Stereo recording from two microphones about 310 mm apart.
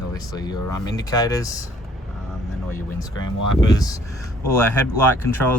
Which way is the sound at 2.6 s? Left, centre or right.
Centre.